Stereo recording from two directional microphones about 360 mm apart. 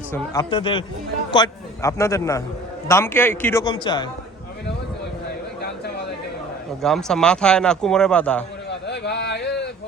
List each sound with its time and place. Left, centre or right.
0.1 s a man's voice: centre
6.8 s a man's voice: centre
8.9 s a sound: left